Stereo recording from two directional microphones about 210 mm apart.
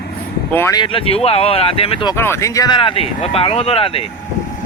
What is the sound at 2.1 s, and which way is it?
Speech, 10° left (ahead or behind).